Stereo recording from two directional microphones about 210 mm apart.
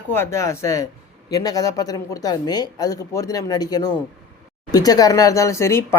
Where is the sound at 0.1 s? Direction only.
10° left (ahead or behind).